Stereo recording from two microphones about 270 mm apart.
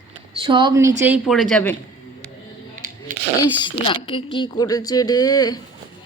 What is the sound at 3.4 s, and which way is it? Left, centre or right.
Speech, centre.